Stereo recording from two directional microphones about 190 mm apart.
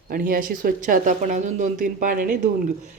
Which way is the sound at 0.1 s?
50° right (ahead or behind).